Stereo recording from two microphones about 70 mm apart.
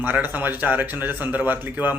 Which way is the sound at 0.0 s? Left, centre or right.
Right.